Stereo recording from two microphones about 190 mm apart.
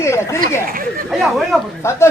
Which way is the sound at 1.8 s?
15° left (ahead or behind).